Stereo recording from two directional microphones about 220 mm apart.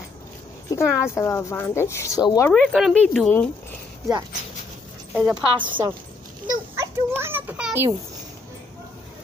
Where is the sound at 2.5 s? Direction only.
Centre (ahead or behind).